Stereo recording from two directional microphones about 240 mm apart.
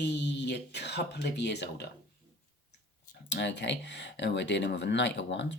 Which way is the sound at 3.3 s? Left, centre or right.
Left.